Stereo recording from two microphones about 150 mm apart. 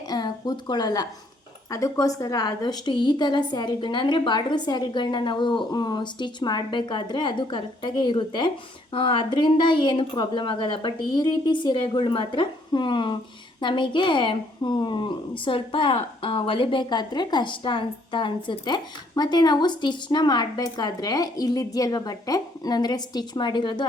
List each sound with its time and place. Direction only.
0.1 s a woman's voice: 30° left (ahead or behind)